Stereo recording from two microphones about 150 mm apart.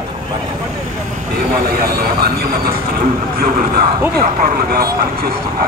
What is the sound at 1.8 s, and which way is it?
Vehicle, 85° right.